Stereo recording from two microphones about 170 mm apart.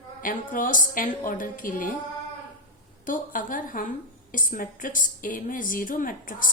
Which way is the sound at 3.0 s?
50° left (ahead or behind).